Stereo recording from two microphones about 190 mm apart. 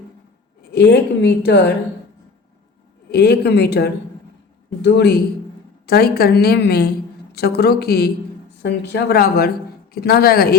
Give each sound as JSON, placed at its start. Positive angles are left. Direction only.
{"t": 0.7, "sound": "a woman's voice", "side_deg": 60}
{"t": 3.1, "sound": "a woman's voice", "side_deg": 60}